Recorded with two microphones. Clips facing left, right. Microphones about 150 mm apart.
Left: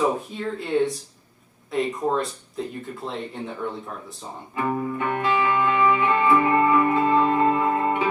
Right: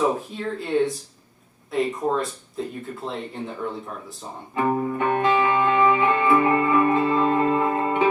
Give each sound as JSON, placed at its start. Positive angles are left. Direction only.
{"t": 0.0, "sound": "speech", "side_deg": 0}
{"t": 4.6, "sound": "music", "side_deg": -35}
{"t": 4.9, "sound": "music", "side_deg": -20}